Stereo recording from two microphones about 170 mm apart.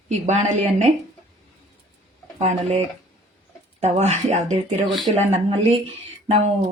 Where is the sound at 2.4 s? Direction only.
40° right (ahead or behind).